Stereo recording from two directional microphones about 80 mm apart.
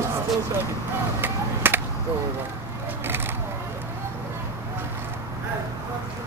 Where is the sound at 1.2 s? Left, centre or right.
Right.